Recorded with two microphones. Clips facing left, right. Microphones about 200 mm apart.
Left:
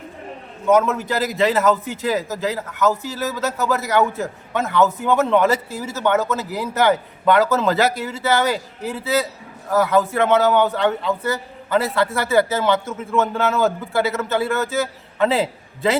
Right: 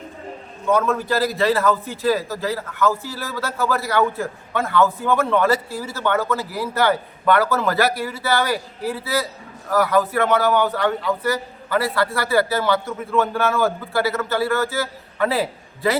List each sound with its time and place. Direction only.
0.7 s a man's voice: 20° left (ahead or behind)